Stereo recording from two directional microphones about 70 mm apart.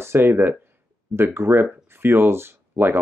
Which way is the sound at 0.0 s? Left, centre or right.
Right.